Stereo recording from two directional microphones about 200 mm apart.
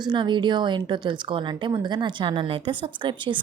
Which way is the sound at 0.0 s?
20° right (ahead or behind).